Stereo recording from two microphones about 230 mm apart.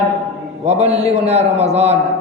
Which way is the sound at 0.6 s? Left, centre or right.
Right.